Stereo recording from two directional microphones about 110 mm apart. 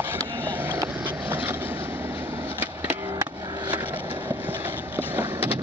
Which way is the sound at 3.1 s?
40° right (ahead or behind).